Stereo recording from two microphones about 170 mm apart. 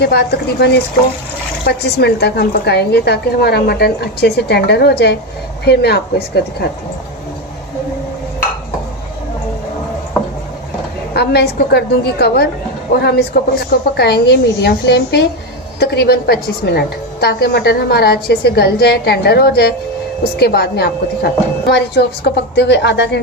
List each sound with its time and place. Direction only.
0.0 s a woman's voice: 75° left (ahead or behind)
11.1 s a woman's voice: 75° left (ahead or behind)
12.9 s a woman's voice: 75° left (ahead or behind)